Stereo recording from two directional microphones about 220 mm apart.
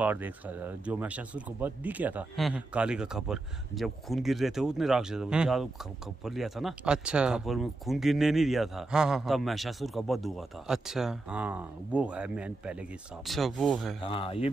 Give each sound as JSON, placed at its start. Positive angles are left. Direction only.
{"t": 0.0, "sound": "speech", "side_deg": -5}
{"t": 14.0, "sound": "speech", "side_deg": 25}